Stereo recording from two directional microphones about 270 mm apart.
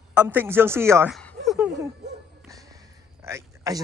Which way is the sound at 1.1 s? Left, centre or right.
Centre.